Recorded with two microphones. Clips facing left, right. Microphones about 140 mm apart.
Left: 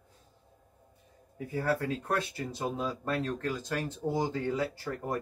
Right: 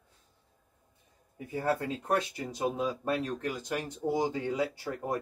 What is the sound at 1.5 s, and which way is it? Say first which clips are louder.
Speech: even; 20° right (ahead or behind).